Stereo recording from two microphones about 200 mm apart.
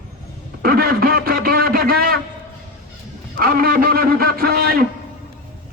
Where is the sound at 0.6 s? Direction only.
50° right (ahead or behind).